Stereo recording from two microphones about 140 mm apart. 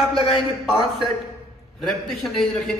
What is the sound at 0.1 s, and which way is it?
Speech, 40° left (ahead or behind).